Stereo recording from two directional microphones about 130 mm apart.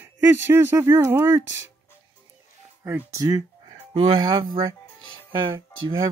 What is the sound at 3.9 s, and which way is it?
Speech, 35° right (ahead or behind).